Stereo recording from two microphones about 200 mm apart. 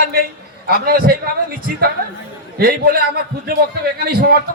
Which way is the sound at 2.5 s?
50° right (ahead or behind).